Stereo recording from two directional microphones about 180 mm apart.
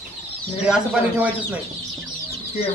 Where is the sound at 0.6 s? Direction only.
5° right (ahead or behind).